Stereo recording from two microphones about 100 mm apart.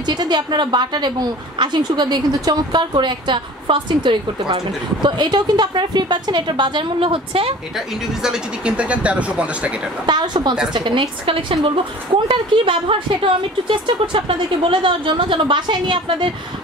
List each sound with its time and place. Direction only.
0.0 s a woman's voice: 45° right (ahead or behind); by 7.5 s 65° right (ahead or behind)
7.7 s speech: 5° right (ahead or behind)
10.0 s a woman's voice: 45° right (ahead or behind)